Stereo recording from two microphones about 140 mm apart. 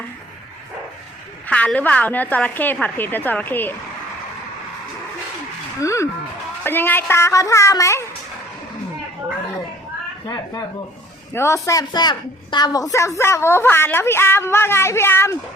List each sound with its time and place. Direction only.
1.5 s a woman's voice: 10° left (ahead or behind)
5.8 s a sound: 20° left (ahead or behind)
6.7 s a woman's voice: 15° left (ahead or behind)
10.2 s a woman's voice: 30° left (ahead or behind)